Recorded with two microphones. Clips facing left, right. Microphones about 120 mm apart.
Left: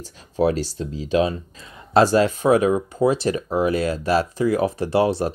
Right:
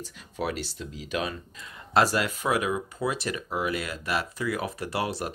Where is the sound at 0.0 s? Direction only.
35° left (ahead or behind).